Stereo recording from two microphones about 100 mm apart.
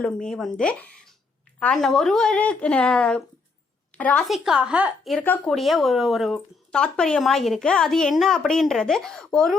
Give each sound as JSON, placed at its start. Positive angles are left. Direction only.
{"t": 0.0, "sound": "a woman's voice", "side_deg": 5}
{"t": 4.2, "sound": "speech", "side_deg": -5}
{"t": 5.5, "sound": "speech", "side_deg": 0}